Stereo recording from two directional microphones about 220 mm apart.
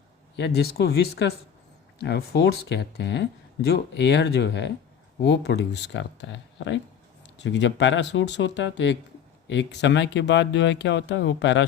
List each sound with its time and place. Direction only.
0.3 s speech: 50° left (ahead or behind)